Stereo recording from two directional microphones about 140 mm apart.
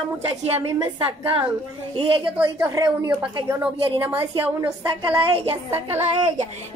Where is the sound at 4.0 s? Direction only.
10° right (ahead or behind).